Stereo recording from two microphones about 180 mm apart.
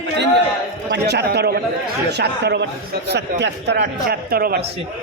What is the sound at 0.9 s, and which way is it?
A man's voice, 70° right (ahead or behind).